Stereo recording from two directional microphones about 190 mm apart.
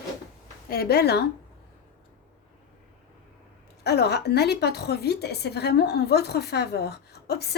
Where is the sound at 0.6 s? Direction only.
50° left (ahead or behind).